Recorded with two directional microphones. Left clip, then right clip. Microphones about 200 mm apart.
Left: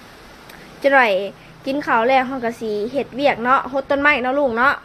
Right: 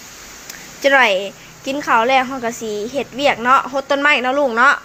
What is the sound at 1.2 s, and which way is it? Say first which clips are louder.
A woman's voice: right 1 dB; 15° left (ahead or behind).